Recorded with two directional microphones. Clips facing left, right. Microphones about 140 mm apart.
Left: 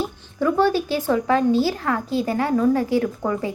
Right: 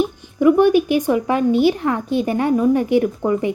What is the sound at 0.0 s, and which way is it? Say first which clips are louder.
A woman's voice: right 7 dB; 15° right (ahead or behind).